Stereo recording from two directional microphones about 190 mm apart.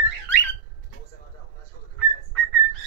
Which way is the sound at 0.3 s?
10° left (ahead or behind).